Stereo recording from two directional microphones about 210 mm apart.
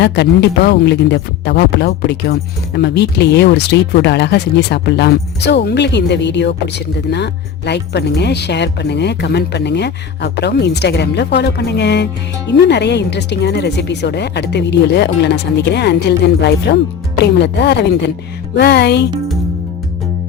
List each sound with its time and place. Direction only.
0.0 s speech: 55° left (ahead or behind)